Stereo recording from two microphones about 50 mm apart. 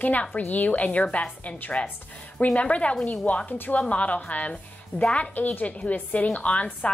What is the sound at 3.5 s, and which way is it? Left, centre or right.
A woman's voice, left.